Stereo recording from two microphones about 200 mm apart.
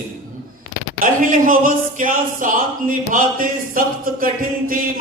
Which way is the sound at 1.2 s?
40° right (ahead or behind).